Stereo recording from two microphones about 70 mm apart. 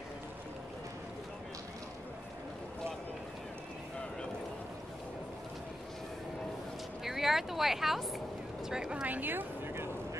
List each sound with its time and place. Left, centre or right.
7.1 s vehicle: centre
8.6 s speech: centre
9.0 s speech: right